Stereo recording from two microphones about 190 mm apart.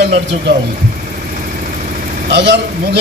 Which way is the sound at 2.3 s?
65° right (ahead or behind).